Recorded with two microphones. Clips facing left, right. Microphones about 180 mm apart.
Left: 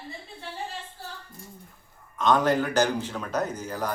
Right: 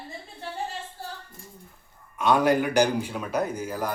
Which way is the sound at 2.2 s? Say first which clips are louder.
Right 1 dB; 10° right (ahead or behind).